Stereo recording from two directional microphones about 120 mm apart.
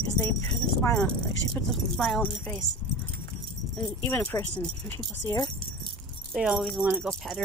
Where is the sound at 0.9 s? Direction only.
5° left (ahead or behind).